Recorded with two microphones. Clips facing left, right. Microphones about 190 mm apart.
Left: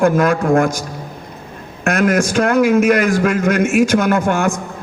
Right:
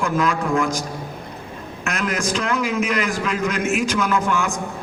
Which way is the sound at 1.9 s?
45° left (ahead or behind).